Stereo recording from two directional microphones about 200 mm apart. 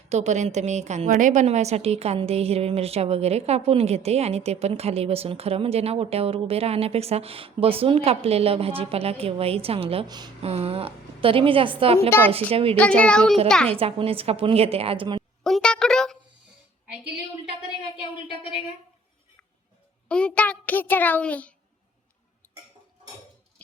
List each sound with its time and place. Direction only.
0.1 s a woman's voice: 35° right (ahead or behind)
13.0 s speech: 5° left (ahead or behind)
13.7 s a woman's voice: 30° right (ahead or behind)
15.4 s speech: 5° left (ahead or behind)
20.1 s a child's voice: 5° left (ahead or behind)